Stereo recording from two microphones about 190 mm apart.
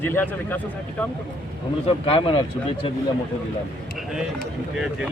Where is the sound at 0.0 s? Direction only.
10° left (ahead or behind).